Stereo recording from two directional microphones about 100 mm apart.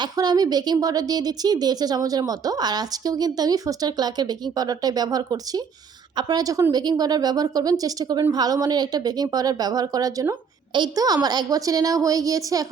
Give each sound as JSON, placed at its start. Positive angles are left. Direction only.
{"t": 0.0, "sound": "speech", "side_deg": -40}